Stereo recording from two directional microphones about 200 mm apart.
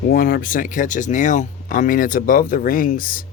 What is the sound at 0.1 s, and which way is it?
Speech, 45° left (ahead or behind).